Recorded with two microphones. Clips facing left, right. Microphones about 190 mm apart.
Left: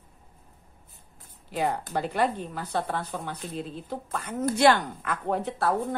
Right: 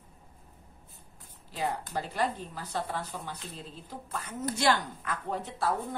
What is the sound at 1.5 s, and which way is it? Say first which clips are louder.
A woman's voice: left 5 dB; 60° left (ahead or behind).